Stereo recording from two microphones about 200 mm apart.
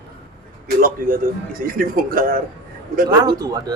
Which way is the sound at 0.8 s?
45° right (ahead or behind).